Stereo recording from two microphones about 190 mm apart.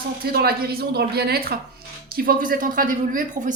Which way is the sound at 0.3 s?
55° right (ahead or behind).